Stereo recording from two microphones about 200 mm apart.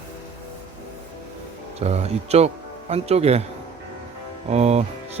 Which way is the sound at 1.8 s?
30° right (ahead or behind).